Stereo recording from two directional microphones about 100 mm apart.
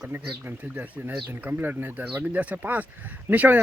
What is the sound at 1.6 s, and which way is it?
Speech, 20° right (ahead or behind).